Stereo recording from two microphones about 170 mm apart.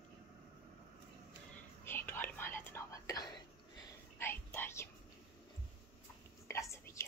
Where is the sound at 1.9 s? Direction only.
10° left (ahead or behind).